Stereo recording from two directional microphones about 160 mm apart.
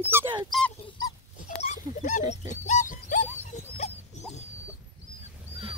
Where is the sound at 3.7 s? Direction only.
45° left (ahead or behind).